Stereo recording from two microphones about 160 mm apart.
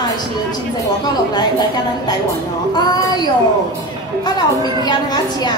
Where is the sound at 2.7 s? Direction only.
25° left (ahead or behind).